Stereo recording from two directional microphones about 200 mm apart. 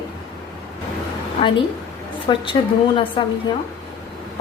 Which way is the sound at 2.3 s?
25° left (ahead or behind).